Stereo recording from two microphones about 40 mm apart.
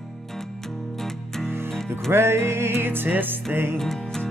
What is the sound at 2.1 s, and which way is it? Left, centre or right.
Music, right.